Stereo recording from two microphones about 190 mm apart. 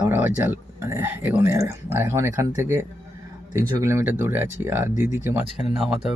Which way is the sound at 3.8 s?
15° right (ahead or behind).